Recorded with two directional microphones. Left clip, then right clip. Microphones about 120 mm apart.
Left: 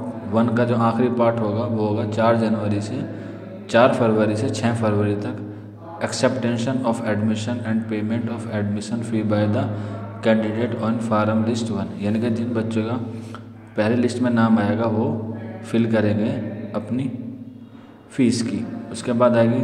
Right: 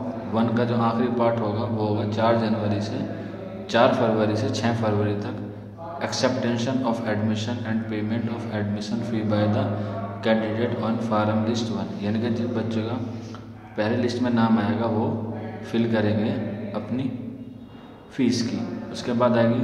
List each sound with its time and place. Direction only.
0.3 s a man's voice: 35° left (ahead or behind)
18.1 s a man's voice: 35° left (ahead or behind)